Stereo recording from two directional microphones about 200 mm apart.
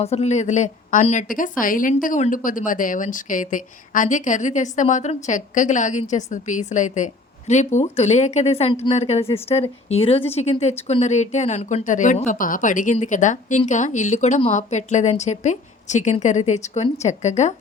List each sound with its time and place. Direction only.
0.0 s speech: 30° left (ahead or behind)